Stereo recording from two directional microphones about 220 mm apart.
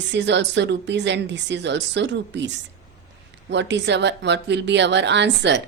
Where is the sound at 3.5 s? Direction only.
50° right (ahead or behind).